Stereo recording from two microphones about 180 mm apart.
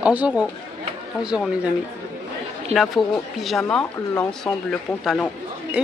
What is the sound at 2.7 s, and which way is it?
Speech, centre (ahead or behind).